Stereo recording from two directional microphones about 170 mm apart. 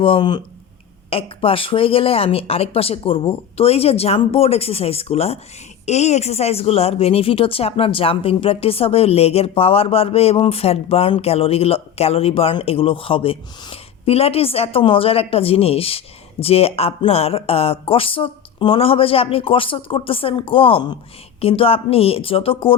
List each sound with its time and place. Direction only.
0.0 s speech: 30° left (ahead or behind)